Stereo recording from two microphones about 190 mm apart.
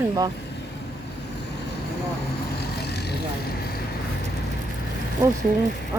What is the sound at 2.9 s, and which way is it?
Vehicle, 60° left (ahead or behind).